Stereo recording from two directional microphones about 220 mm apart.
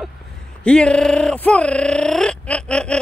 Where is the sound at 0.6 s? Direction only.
5° left (ahead or behind).